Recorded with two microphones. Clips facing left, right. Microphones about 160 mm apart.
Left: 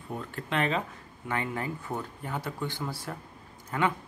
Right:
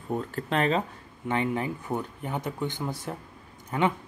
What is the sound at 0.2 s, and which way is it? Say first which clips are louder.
Speech: right 1 dB; 35° right (ahead or behind).